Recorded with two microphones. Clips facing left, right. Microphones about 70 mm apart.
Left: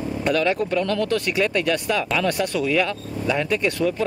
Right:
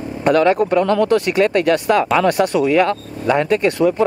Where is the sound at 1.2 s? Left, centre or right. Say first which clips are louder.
Right 7 dB; right.